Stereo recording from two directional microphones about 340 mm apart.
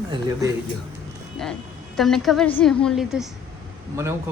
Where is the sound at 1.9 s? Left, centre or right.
Centre.